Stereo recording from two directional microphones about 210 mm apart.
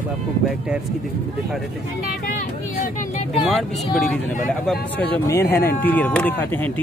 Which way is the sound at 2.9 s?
30° left (ahead or behind).